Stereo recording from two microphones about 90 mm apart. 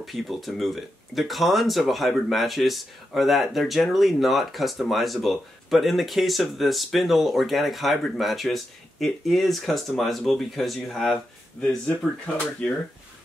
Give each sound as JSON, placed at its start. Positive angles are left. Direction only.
{"t": 0.0, "sound": "speech", "side_deg": 0}
{"t": 12.3, "sound": "speech", "side_deg": 15}